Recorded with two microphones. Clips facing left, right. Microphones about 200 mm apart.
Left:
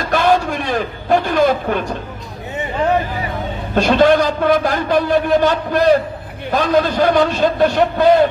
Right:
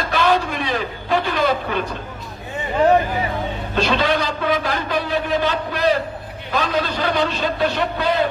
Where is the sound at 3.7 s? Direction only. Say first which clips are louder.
Left 8 dB; 50° left (ahead or behind).